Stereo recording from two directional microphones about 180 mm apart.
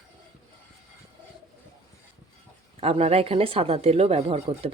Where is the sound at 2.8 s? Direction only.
35° right (ahead or behind).